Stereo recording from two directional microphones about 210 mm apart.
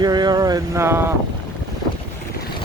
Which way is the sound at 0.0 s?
20° right (ahead or behind).